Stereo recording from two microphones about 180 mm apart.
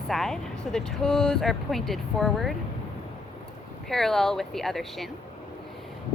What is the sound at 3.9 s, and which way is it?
A woman's voice, centre (ahead or behind).